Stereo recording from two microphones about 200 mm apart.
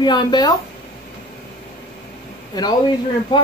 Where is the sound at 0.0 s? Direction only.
20° left (ahead or behind).